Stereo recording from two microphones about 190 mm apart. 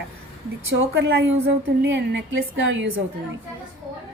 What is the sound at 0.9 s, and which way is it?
A woman's voice, 75° right (ahead or behind).